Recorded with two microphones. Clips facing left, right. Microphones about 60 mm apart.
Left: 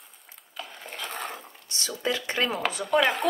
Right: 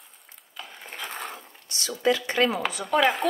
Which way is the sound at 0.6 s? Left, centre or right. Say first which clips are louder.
Even; centre.